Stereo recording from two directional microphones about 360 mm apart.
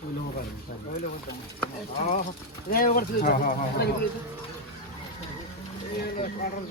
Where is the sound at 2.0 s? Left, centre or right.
Centre.